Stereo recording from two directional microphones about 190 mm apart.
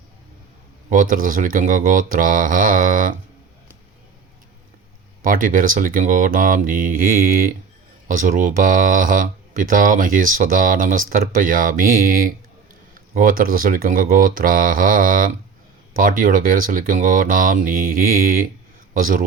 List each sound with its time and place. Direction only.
0.9 s speech: 45° right (ahead or behind)
5.2 s speech: 45° right (ahead or behind)